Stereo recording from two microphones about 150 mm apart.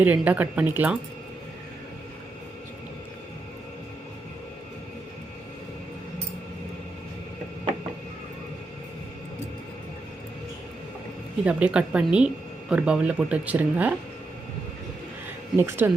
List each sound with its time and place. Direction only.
0.0 s speech: 10° right (ahead or behind)
11.4 s speech: 5° right (ahead or behind)
15.5 s speech: 15° right (ahead or behind)